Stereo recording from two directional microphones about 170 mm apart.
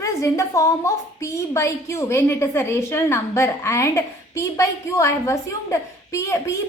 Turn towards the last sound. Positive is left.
turn(degrees=15)  # may be behind; listen again after turning